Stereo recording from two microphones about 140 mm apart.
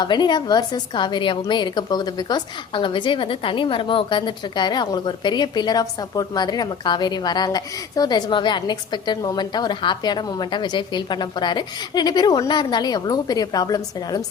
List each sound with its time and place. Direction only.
0.0 s a woman's voice: 30° left (ahead or behind)